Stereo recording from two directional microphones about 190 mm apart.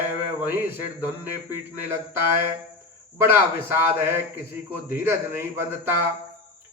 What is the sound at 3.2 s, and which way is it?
A man's voice, 10° right (ahead or behind).